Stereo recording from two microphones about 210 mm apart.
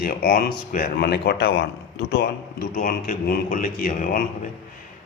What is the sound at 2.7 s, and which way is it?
A man's voice, 40° left (ahead or behind).